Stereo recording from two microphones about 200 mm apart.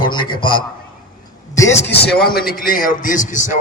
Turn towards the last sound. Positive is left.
turn(degrees=40)  # may be behind; listen again after turning